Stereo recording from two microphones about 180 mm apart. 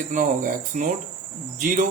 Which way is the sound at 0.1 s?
45° right (ahead or behind).